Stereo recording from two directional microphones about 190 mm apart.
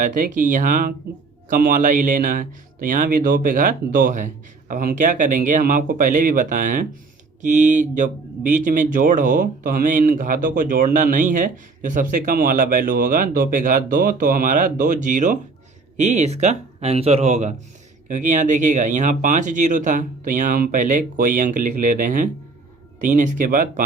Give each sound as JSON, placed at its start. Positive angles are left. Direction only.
{"t": 0.0, "sound": "speech", "side_deg": -45}